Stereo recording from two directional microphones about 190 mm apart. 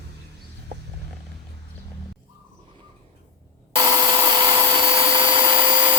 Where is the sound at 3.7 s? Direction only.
20° right (ahead or behind).